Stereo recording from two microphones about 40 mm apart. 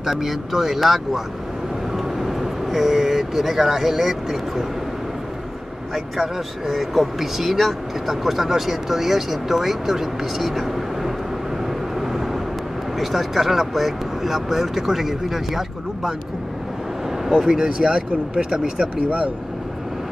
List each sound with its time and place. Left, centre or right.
0.0 s speech: centre
6.7 s speech: centre
13.0 s speech: centre
17.4 s speech: centre
17.6 s speech: right
19.0 s speech: right